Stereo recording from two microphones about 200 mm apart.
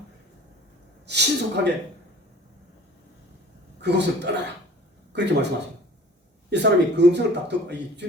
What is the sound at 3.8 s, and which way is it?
A man's voice, 60° right (ahead or behind).